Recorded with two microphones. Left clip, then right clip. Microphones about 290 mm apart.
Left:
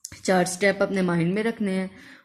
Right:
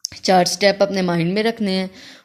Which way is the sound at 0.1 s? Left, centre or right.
Centre.